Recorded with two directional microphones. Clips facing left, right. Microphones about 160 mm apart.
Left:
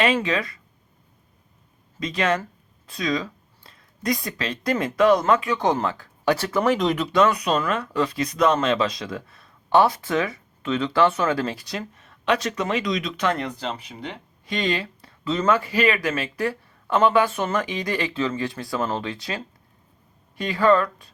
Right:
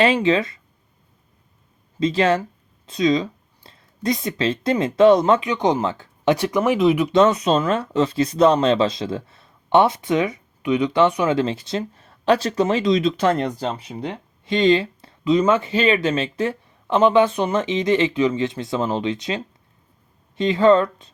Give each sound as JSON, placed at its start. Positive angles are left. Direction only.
{"t": 0.0, "sound": "speech", "side_deg": -25}
{"t": 2.0, "sound": "speech", "side_deg": -30}
{"t": 6.6, "sound": "speech", "side_deg": -5}
{"t": 7.1, "sound": "speech", "side_deg": -25}
{"t": 14.4, "sound": "a sound", "side_deg": -25}
{"t": 15.3, "sound": "speech", "side_deg": -20}